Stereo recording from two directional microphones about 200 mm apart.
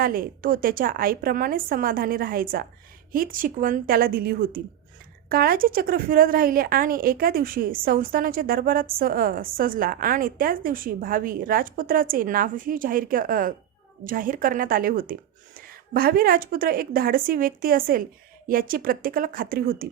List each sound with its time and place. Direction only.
0.0 s speech: 45° right (ahead or behind)